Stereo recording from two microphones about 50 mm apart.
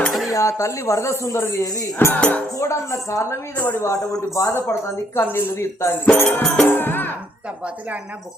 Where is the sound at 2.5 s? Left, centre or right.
Left.